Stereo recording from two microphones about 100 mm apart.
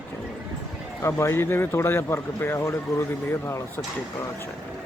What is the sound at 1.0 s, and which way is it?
Speech, 30° left (ahead or behind).